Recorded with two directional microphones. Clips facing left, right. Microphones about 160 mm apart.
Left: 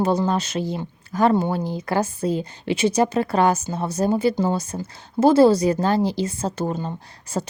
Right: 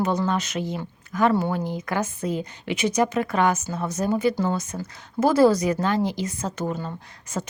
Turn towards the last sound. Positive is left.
turn(degrees=35)  # may be behind; listen again after turning